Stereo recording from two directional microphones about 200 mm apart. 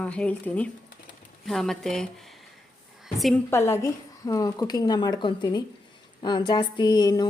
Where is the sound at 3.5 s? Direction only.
10° left (ahead or behind).